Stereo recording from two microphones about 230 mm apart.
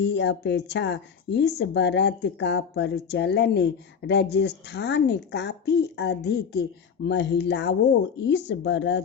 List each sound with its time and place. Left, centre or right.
0.0 s speech: left